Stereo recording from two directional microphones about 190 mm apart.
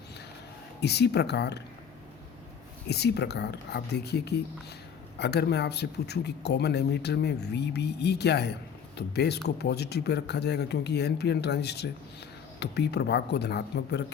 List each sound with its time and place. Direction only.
0.8 s speech: 60° left (ahead or behind)
2.9 s speech: 60° left (ahead or behind)